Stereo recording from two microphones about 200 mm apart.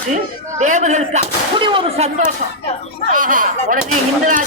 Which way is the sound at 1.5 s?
25° right (ahead or behind).